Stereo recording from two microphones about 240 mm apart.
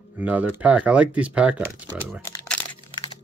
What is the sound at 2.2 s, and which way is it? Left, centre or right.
Crumpling, centre.